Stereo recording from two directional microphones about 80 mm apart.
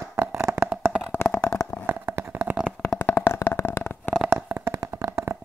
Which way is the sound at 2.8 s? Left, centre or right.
Left.